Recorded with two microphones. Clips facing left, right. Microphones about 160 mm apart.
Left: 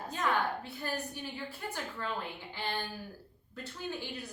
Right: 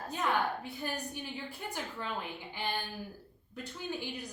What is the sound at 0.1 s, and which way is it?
A woman's voice, 15° right (ahead or behind).